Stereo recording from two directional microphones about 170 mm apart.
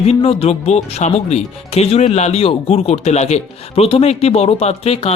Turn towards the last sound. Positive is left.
turn(degrees=35)  # may be behind; listen again after turning